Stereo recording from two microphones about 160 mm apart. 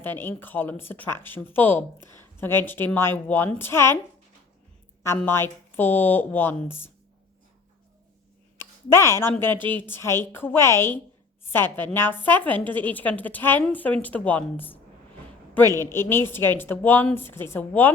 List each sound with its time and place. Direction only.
0.0 s speech: 15° left (ahead or behind)
5.0 s speech: 15° left (ahead or behind)
8.9 s speech: 15° left (ahead or behind)